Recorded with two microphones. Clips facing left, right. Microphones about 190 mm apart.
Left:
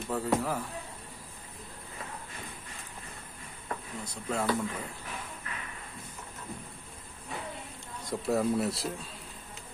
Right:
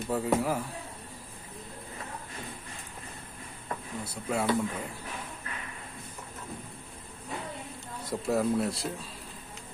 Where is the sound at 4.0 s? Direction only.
10° right (ahead or behind).